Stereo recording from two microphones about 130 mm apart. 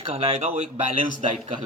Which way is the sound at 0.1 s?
50° right (ahead or behind).